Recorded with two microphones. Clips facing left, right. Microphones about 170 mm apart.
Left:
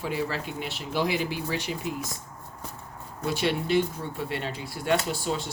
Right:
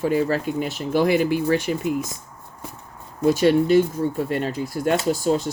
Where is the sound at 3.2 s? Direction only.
45° right (ahead or behind).